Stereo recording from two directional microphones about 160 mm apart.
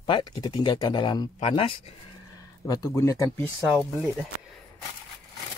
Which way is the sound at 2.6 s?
20° left (ahead or behind).